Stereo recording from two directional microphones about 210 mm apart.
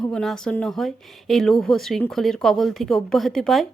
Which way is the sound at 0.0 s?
5° left (ahead or behind).